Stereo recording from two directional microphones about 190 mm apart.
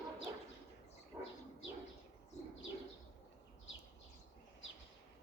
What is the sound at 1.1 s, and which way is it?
Dog, 20° right (ahead or behind).